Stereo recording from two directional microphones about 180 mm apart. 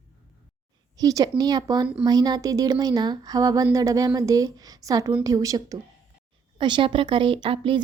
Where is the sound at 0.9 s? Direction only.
20° right (ahead or behind).